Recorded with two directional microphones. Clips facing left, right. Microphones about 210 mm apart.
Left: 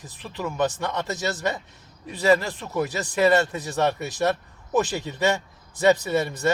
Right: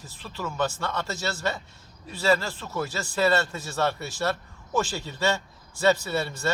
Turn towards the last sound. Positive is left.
turn(degrees=20)  # may be behind; listen again after turning